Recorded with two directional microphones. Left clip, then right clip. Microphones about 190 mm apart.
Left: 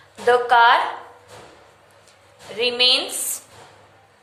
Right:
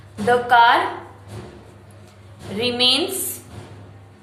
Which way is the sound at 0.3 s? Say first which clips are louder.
Even; 20° left (ahead or behind).